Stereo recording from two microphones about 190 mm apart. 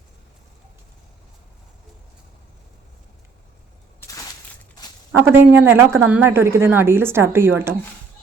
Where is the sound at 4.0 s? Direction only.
15° left (ahead or behind).